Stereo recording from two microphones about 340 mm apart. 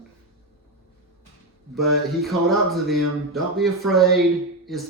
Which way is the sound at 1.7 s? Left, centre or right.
Centre.